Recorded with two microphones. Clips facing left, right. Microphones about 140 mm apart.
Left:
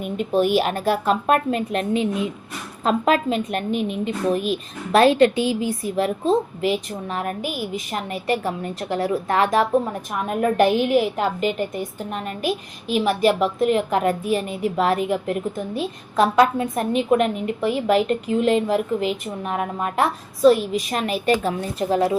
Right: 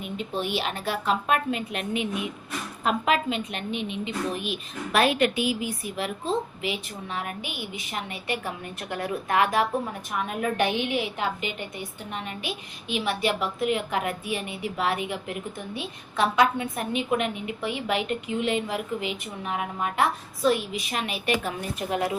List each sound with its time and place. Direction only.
0.0 s a woman's voice: 50° left (ahead or behind); by 22.2 s 30° left (ahead or behind)